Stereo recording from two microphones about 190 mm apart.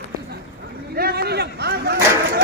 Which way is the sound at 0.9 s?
55° right (ahead or behind).